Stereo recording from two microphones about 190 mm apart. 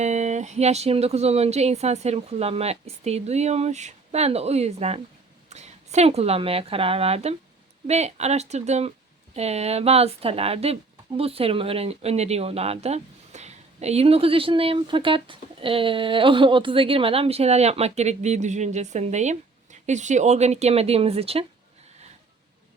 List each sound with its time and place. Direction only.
0.0 s a woman's voice: 35° right (ahead or behind)